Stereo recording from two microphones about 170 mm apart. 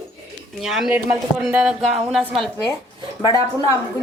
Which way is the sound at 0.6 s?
Centre (ahead or behind).